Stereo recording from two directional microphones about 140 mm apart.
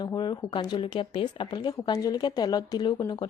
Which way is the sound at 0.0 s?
30° left (ahead or behind).